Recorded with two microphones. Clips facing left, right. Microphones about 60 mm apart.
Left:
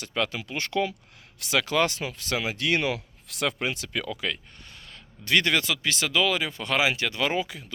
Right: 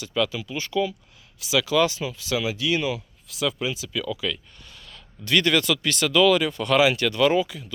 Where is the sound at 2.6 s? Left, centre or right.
Left.